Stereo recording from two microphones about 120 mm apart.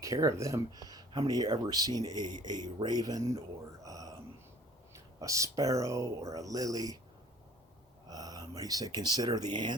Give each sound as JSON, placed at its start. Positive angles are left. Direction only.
{"t": 0.0, "sound": "speech", "side_deg": -25}
{"t": 3.8, "sound": "a sound", "side_deg": -30}
{"t": 4.9, "sound": "speech", "side_deg": -25}
{"t": 8.0, "sound": "speech", "side_deg": -30}